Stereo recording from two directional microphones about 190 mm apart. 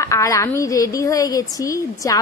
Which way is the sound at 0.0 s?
15° left (ahead or behind).